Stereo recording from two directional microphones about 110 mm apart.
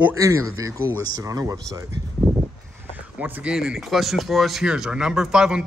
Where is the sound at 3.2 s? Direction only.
5° right (ahead or behind).